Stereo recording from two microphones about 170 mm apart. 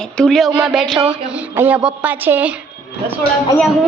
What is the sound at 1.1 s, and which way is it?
A woman's voice, 10° right (ahead or behind).